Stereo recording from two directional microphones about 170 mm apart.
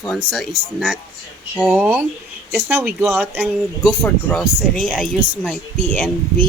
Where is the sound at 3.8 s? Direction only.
5° left (ahead or behind).